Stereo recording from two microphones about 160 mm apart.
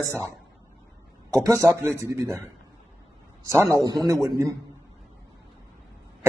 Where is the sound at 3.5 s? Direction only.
20° right (ahead or behind).